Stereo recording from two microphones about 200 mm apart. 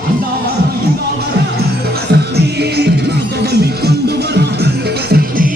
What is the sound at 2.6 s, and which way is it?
Music, 55° right (ahead or behind).